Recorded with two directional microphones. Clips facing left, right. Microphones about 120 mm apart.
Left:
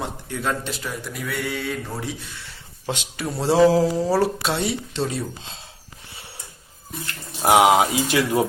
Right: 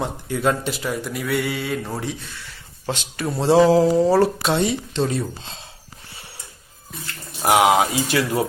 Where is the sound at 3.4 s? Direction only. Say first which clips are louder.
Right 2 dB; 5° left (ahead or behind).